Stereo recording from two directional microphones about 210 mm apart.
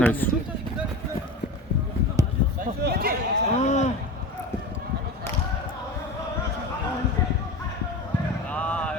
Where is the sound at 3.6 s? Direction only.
35° left (ahead or behind).